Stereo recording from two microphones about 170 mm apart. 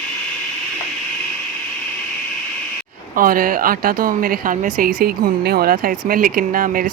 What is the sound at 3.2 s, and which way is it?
A woman's voice, 55° right (ahead or behind).